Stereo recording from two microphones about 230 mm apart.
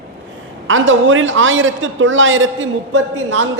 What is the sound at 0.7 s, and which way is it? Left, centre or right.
A woman's voice, right.